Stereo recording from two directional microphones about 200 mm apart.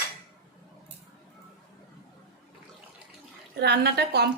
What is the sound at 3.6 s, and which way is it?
Speech, 55° right (ahead or behind).